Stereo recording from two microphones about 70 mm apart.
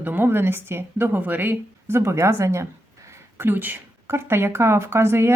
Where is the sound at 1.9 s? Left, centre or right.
Right.